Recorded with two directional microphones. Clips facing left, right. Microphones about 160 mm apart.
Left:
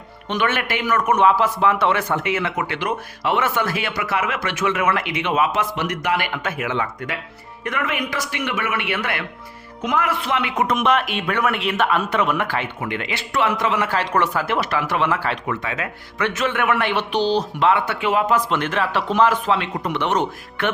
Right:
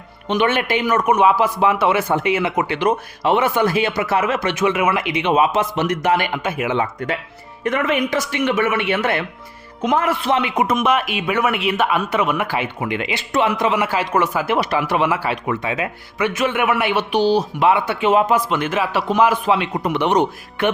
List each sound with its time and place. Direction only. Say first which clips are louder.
0.3 s a man's voice: right 4 dB; 20° right (ahead or behind)
10.8 s a man's voice: right 1 dB; 5° right (ahead or behind); by 18.3 s 20° right (ahead or behind)
18.3 s a man's voice: right 2 dB; 5° right (ahead or behind)